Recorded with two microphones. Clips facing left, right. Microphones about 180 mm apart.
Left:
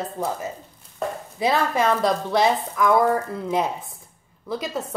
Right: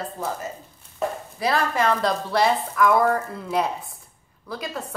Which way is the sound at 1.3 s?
20° left (ahead or behind).